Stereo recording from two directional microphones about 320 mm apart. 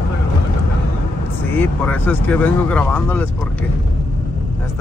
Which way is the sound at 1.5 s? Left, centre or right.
Centre.